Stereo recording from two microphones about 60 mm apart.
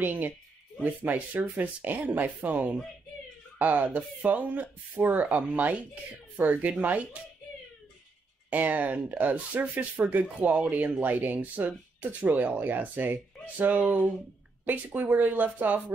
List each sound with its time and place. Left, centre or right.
0.0 s speech: right
8.5 s speech: right